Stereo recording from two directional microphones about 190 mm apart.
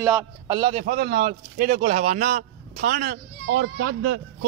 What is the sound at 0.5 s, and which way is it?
Speech, 30° right (ahead or behind).